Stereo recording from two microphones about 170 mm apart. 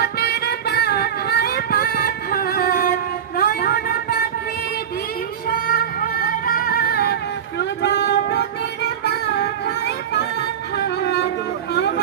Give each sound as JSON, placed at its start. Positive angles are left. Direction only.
{"t": 0.0, "sound": "music", "side_deg": 70}
{"t": 5.5, "sound": "music", "side_deg": 55}
{"t": 7.6, "sound": "music", "side_deg": 90}